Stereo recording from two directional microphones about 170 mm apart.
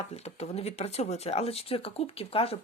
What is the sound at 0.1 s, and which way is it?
Speech, 40° left (ahead or behind).